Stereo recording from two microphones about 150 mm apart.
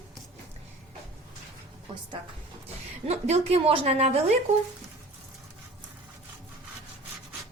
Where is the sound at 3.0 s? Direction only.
45° right (ahead or behind).